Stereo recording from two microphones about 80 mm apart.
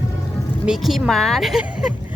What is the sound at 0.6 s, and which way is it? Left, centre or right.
Speech, centre.